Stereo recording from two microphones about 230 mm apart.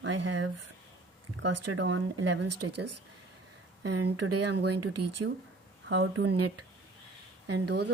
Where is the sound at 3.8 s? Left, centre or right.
Right.